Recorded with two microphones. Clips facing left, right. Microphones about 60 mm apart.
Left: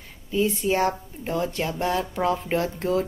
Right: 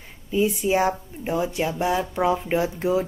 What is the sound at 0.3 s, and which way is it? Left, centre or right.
Speech, centre.